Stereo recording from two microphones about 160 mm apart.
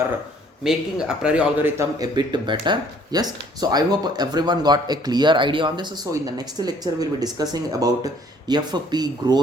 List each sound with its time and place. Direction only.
0.6 s speech: 5° right (ahead or behind); by 9.4 s 25° right (ahead or behind)